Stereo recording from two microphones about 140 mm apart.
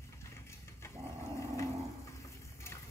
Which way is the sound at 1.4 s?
20° left (ahead or behind).